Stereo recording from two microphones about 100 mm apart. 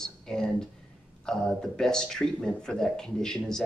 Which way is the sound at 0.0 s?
5° left (ahead or behind).